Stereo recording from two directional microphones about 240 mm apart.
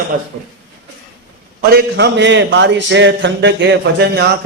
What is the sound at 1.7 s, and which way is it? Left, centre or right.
A man's voice, right.